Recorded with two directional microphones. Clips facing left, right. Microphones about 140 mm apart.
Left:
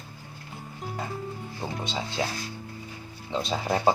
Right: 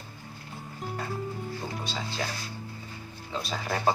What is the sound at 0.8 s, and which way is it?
Music, centre (ahead or behind).